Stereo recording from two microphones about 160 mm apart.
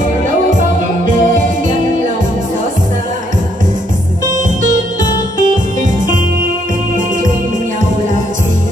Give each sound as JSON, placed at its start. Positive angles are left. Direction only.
{"t": 0.6, "sound": "music", "side_deg": -55}
{"t": 5.4, "sound": "music", "side_deg": -55}